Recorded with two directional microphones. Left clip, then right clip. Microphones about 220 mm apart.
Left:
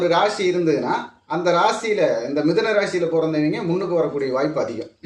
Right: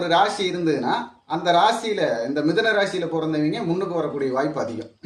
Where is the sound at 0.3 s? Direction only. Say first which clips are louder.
Left 3 dB; 15° right (ahead or behind).